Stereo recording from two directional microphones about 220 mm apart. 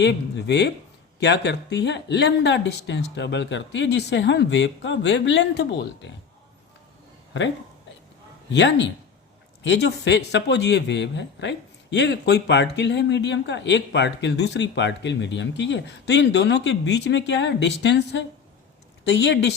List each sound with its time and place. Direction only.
0.0 s speech: 50° left (ahead or behind)
8.5 s speech: 55° left (ahead or behind)